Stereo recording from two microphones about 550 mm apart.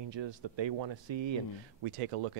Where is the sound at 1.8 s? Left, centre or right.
Right.